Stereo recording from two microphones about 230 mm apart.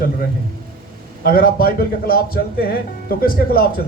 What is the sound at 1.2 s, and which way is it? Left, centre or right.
Speech, left.